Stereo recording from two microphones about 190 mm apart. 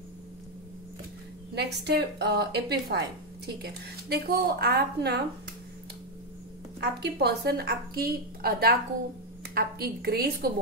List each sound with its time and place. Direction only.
1.5 s a woman's voice: 60° right (ahead or behind)
6.8 s a woman's voice: 60° right (ahead or behind)